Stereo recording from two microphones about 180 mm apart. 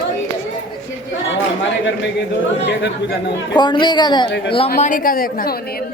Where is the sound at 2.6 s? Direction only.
80° left.